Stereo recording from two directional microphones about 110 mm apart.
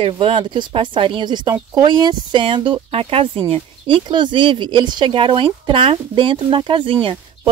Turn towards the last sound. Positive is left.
turn(degrees=-55)  # may be behind; listen again after turning